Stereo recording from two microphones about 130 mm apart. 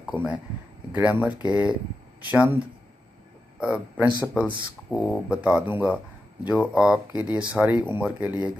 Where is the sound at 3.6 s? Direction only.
10° right (ahead or behind).